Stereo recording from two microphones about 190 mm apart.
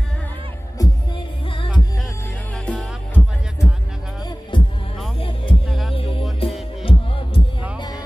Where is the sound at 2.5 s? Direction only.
5° left (ahead or behind).